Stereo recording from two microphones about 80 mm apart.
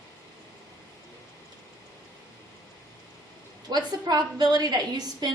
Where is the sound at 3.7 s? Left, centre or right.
Right.